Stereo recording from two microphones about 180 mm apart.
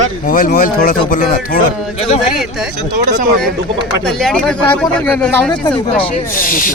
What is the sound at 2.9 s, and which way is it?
Speech, 45° right (ahead or behind).